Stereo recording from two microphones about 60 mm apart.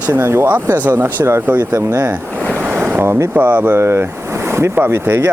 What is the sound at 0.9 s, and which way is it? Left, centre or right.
Speech, right.